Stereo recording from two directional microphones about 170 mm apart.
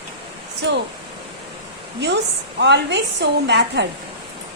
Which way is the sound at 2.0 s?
90° right.